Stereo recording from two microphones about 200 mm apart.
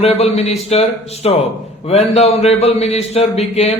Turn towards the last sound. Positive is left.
turn(degrees=30)  # may be behind; listen again after turning